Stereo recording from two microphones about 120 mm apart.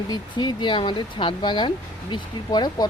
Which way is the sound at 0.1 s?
40° left (ahead or behind).